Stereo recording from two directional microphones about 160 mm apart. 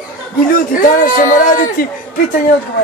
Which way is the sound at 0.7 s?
55° left (ahead or behind).